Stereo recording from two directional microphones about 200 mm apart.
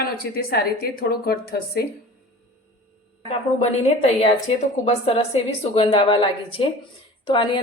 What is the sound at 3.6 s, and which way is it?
A woman's voice, 35° left (ahead or behind).